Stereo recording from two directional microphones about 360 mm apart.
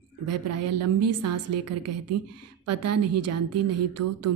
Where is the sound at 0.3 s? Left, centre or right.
Right.